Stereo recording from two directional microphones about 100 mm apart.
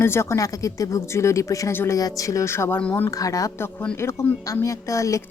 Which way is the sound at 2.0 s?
35° left (ahead or behind).